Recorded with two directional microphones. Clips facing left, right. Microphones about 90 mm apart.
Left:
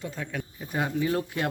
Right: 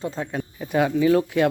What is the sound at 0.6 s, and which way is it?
Speech, 90° right.